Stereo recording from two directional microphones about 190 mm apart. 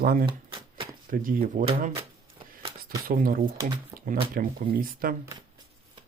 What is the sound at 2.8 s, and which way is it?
Speech, 50° right (ahead or behind).